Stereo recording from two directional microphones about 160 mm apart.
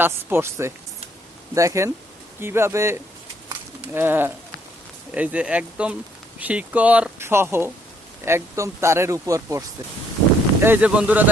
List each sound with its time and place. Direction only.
0.0 s speech: 15° right (ahead or behind)